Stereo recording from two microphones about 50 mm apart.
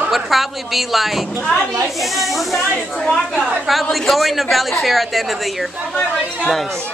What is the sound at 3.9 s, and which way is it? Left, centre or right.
A woman's voice, centre.